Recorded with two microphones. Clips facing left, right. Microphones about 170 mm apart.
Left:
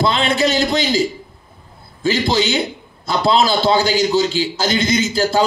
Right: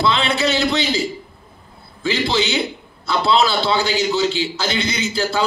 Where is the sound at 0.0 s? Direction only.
45° left (ahead or behind).